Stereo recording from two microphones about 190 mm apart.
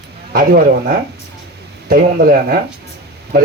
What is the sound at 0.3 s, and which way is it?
Speech, 45° right (ahead or behind).